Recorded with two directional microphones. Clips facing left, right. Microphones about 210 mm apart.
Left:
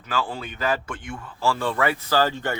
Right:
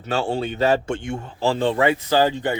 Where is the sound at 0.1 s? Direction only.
30° right (ahead or behind).